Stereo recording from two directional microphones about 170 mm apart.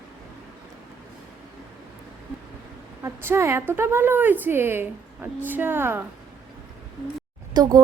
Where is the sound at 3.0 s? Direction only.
15° right (ahead or behind).